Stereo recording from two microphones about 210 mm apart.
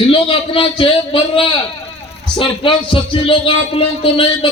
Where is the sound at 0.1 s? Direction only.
25° left (ahead or behind).